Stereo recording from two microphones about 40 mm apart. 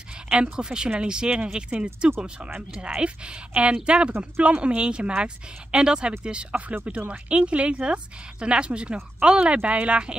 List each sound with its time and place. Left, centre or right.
0.3 s speech: right